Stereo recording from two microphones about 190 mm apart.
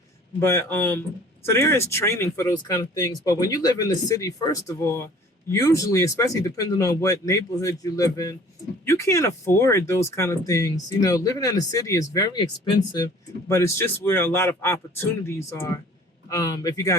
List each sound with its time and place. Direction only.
0.3 s speech: 15° left (ahead or behind)
13.5 s speech: 15° left (ahead or behind)